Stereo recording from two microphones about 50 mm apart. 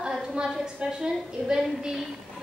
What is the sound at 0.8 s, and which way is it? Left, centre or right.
A woman's voice, centre.